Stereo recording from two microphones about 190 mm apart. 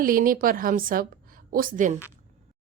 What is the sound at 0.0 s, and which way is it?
A woman's voice, 45° right (ahead or behind).